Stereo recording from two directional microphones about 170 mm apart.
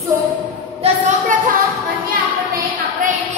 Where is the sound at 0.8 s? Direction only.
50° right (ahead or behind).